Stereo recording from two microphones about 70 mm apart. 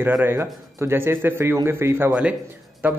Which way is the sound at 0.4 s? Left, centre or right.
Right.